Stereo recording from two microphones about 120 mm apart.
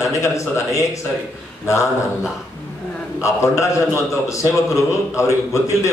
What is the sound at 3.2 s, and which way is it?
A man's voice, 25° left (ahead or behind).